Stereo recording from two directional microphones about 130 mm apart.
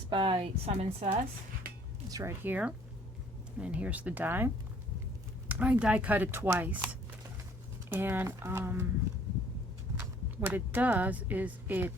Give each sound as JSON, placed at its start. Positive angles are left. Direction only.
{"t": 0.1, "sound": "speech", "side_deg": -40}
{"t": 2.0, "sound": "speech", "side_deg": -25}
{"t": 2.4, "sound": "speech", "side_deg": -15}
{"t": 10.4, "sound": "speech", "side_deg": -15}